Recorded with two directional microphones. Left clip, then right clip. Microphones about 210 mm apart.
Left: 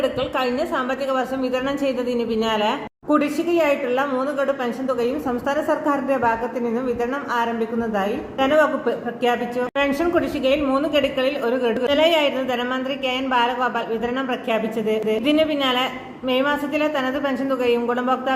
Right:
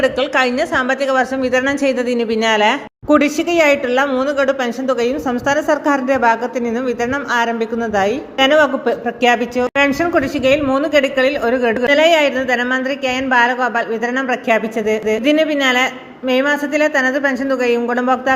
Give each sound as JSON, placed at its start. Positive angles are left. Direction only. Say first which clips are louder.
{"t": 0.0, "sound": "a woman's voice", "louder": "right 7 dB", "side_deg": -25}
{"t": 11.5, "sound": "a woman's voice", "louder": "right 5 dB", "side_deg": -60}
{"t": 11.8, "sound": "a woman's voice", "louder": "right 6 dB", "side_deg": -25}
{"t": 15.3, "sound": "a woman's voice", "louder": "right 5 dB", "side_deg": -30}
{"t": 16.8, "sound": "a woman's voice", "louder": "right 7 dB", "side_deg": -25}